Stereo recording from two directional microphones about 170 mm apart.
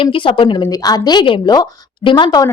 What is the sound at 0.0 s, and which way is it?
Speech, 30° left (ahead or behind).